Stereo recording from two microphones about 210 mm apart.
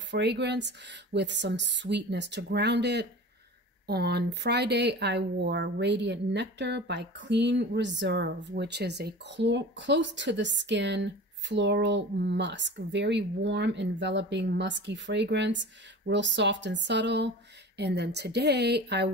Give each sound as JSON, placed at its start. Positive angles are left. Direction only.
{"t": 0.1, "sound": "a woman's voice", "side_deg": -55}